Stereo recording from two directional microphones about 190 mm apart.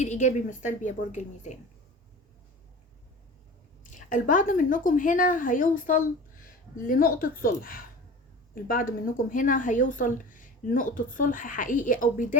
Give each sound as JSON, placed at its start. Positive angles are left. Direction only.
{"t": 0.0, "sound": "a woman's voice", "side_deg": 40}
{"t": 3.8, "sound": "a woman's voice", "side_deg": 45}